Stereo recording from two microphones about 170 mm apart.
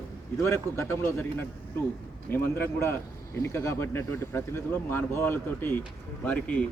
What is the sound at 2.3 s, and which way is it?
A man's voice, 15° left (ahead or behind).